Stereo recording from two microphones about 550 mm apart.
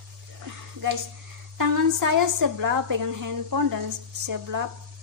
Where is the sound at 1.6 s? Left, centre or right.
Right.